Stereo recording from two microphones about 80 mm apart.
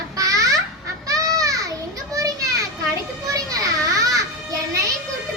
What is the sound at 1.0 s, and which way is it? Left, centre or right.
Children playing, right.